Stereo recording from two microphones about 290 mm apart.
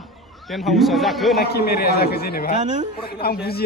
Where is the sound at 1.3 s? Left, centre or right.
Left.